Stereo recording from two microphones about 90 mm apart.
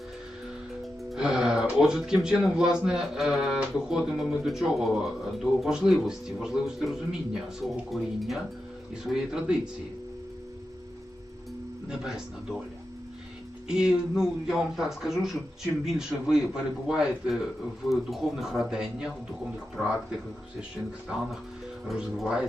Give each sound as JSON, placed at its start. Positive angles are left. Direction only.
{"t": 1.1, "sound": "music", "side_deg": -5}
{"t": 1.8, "sound": "a man's voice", "side_deg": -5}
{"t": 11.9, "sound": "a man's voice", "side_deg": -5}
{"t": 13.7, "sound": "a man's voice", "side_deg": -10}
{"t": 21.8, "sound": "speech", "side_deg": -5}